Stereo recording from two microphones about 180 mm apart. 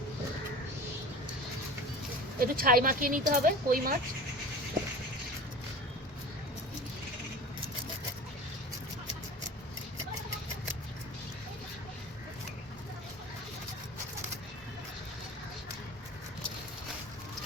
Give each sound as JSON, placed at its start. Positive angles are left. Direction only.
{"t": 2.4, "sound": "speech", "side_deg": -55}